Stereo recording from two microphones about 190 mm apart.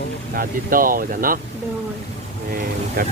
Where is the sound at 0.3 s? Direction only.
50° right (ahead or behind).